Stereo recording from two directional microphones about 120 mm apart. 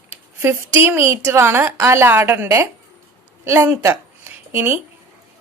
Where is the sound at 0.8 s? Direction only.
20° right (ahead or behind).